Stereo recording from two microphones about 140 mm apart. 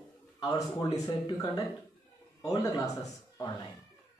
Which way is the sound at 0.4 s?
25° left (ahead or behind).